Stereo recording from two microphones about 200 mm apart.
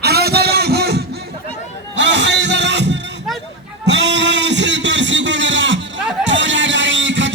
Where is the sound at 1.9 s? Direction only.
65° right (ahead or behind).